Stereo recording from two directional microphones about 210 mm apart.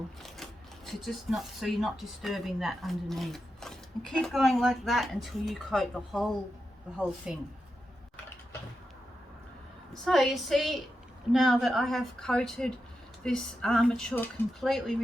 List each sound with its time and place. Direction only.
0.9 s speech: centre (ahead or behind)
9.9 s speech: centre (ahead or behind)